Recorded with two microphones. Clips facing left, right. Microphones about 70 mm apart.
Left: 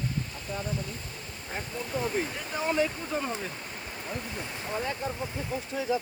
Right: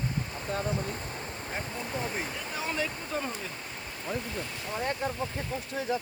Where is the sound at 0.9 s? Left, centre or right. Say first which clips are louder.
Right 4 dB; right.